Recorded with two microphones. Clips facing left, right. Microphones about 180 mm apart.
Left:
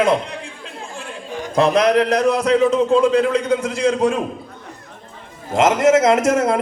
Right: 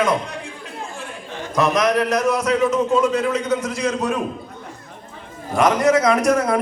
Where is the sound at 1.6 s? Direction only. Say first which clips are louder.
Left 3 dB; 30° left (ahead or behind).